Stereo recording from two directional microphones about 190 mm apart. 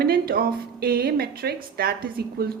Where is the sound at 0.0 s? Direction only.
50° right (ahead or behind).